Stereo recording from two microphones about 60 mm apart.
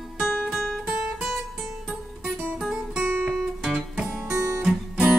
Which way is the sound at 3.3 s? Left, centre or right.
Centre.